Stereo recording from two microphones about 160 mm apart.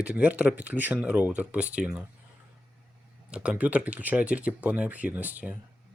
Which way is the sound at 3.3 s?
5° right (ahead or behind).